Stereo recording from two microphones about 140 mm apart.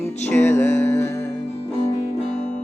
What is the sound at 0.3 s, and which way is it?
Music, 15° left (ahead or behind).